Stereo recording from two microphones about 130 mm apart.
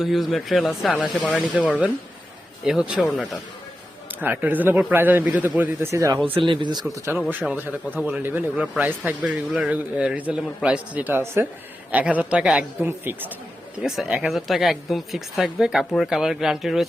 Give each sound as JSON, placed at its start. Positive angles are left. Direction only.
{"t": 0.0, "sound": "speech", "side_deg": 0}
{"t": 1.5, "sound": "a man's voice", "side_deg": -10}
{"t": 4.1, "sound": "a man's voice", "side_deg": -15}
{"t": 6.3, "sound": "speech", "side_deg": -40}
{"t": 6.9, "sound": "a man's voice", "side_deg": -20}
{"t": 13.8, "sound": "speech", "side_deg": -5}